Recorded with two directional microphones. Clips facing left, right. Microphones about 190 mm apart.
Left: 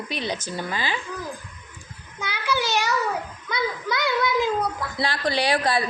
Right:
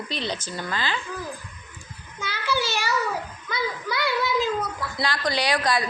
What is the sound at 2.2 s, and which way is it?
Child singing, 15° left (ahead or behind).